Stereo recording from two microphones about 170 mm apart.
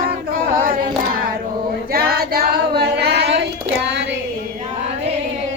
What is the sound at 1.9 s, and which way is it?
Female singing, 60° right (ahead or behind).